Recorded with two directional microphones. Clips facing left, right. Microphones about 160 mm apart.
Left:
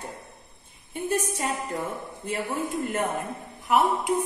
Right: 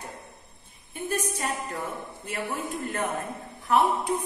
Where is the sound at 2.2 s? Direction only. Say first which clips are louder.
Left 3 dB; 25° left (ahead or behind).